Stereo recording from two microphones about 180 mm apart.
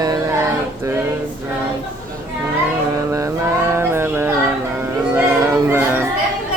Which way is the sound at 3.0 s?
15° right (ahead or behind).